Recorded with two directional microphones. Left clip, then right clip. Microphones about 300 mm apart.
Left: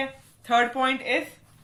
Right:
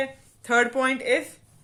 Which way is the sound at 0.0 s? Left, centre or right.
Right.